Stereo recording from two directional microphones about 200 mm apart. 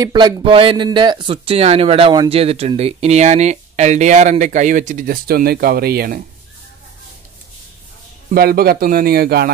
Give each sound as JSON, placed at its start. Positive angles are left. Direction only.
{"t": 0.0, "sound": "speech", "side_deg": -20}
{"t": 8.4, "sound": "speech", "side_deg": -50}